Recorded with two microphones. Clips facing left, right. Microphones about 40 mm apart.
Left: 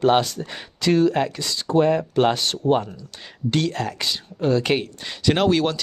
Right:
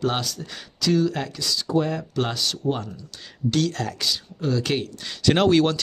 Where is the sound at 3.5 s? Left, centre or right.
Left.